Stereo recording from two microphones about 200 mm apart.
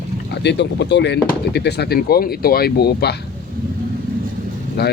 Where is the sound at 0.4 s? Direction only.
60° left (ahead or behind).